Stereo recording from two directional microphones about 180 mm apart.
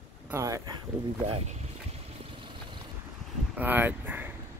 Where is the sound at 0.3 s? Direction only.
20° right (ahead or behind).